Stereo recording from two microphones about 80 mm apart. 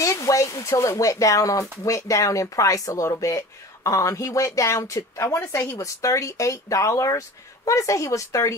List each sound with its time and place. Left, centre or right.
0.0 s speech: left